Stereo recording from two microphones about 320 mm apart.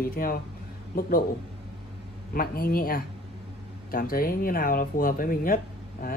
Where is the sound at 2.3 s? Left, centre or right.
Left.